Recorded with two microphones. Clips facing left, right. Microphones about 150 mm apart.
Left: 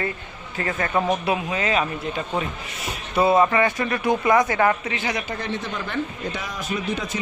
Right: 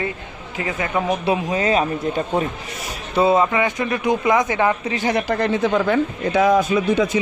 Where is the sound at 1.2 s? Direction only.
30° right (ahead or behind).